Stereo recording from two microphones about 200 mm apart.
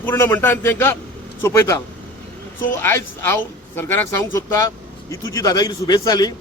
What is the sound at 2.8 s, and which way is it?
A man's voice, 10° left (ahead or behind).